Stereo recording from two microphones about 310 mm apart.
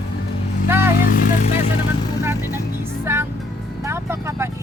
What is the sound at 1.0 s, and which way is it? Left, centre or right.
Speech, left.